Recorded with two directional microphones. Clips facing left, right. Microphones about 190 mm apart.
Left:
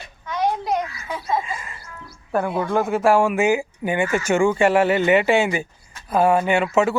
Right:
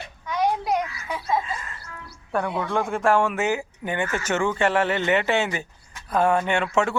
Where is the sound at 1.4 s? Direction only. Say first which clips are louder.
Left 2 dB; 10° left (ahead or behind).